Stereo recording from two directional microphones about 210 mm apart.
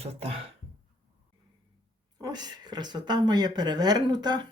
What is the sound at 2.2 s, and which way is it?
Speech, 20° right (ahead or behind).